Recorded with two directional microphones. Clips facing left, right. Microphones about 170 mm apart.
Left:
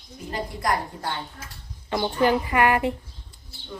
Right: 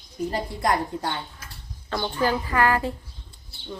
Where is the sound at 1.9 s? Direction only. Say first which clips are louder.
Left 3 dB; 15° left (ahead or behind).